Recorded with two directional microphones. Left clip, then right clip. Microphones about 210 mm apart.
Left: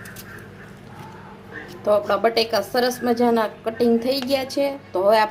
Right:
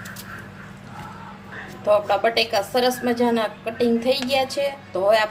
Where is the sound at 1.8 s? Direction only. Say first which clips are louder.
Even; 25° left (ahead or behind).